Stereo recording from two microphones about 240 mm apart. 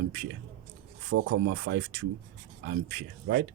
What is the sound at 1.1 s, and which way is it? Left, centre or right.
A man's voice, right.